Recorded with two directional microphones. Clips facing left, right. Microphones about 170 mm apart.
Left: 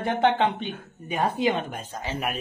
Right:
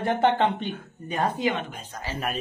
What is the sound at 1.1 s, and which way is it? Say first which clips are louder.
A man's voice: left 1 dB; 10° left (ahead or behind).